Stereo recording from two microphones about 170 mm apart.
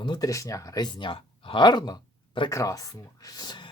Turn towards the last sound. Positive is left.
turn(degrees=25)  # may be behind; listen again after turning